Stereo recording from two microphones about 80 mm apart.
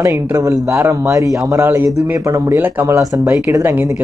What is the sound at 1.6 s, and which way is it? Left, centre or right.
Speech, right.